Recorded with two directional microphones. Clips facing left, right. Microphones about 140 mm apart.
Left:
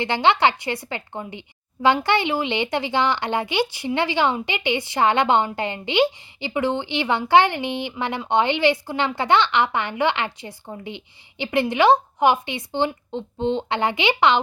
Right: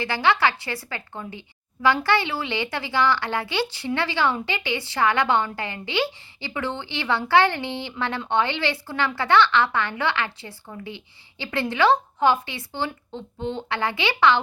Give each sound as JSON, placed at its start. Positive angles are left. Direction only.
{"t": 0.0, "sound": "a woman's voice", "side_deg": 20}